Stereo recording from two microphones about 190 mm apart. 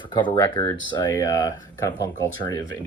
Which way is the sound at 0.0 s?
25° left (ahead or behind).